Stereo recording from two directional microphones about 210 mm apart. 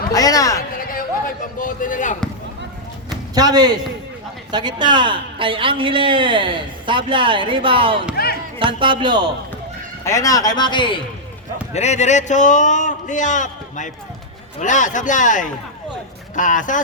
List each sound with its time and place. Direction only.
0.1 s speech: 15° left (ahead or behind)
1.5 s a man's voice: 40° left (ahead or behind)
3.3 s a woman's voice: 20° right (ahead or behind)
8.1 s music: 45° left (ahead or behind)
8.5 s a woman's voice: 25° right (ahead or behind)
10.0 s a man's voice: 15° left (ahead or behind)
11.7 s a man's voice: 30° left (ahead or behind)